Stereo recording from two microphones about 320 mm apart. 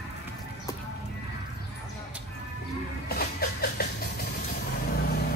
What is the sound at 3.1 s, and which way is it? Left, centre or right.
Music, left.